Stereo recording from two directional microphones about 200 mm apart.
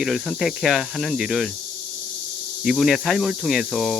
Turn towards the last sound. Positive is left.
turn(degrees=0)  # may be behind; listen again after turning